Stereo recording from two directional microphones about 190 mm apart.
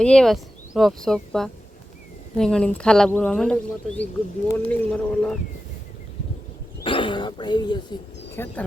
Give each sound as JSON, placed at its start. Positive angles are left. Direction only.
{"t": 0.0, "sound": "speech", "side_deg": 5}
{"t": 6.8, "sound": "speech", "side_deg": 25}
{"t": 8.4, "sound": "speech", "side_deg": 10}